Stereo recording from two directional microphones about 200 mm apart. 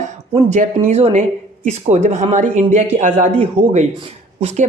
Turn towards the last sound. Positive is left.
turn(degrees=-30)  # may be behind; listen again after turning